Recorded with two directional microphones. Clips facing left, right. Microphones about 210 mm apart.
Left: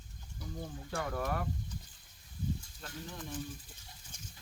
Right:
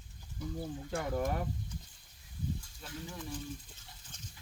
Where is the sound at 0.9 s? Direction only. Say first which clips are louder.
Right 2 dB; 20° right (ahead or behind).